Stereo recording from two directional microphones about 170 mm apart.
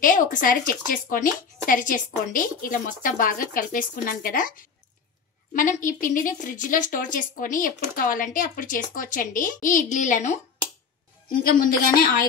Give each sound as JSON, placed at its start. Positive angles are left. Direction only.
{"t": 0.0, "sound": "a woman's voice", "side_deg": 50}
{"t": 5.5, "sound": "a woman's voice", "side_deg": 50}